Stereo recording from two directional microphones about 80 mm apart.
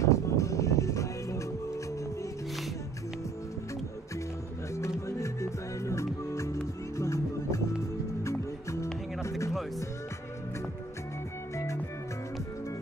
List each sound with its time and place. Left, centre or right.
0.0 s music: left
4.7 s music: left
11.5 s music: left